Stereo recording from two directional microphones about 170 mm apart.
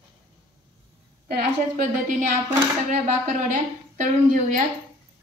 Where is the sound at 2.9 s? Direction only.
45° right (ahead or behind).